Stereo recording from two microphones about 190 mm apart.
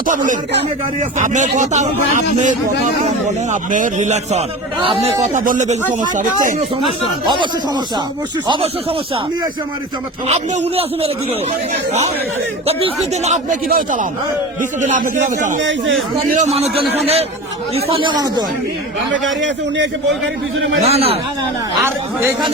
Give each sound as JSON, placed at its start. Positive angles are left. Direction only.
{"t": 0.1, "sound": "speech", "side_deg": -40}
{"t": 8.4, "sound": "speech", "side_deg": -25}
{"t": 10.2, "sound": "speech", "side_deg": -35}
{"t": 19.4, "sound": "a man's voice", "side_deg": -70}
{"t": 20.8, "sound": "speech", "side_deg": -30}